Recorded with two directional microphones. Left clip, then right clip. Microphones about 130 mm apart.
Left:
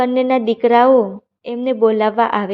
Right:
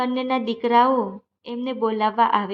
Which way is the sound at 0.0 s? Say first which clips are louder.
Left 8 dB; 40° left (ahead or behind).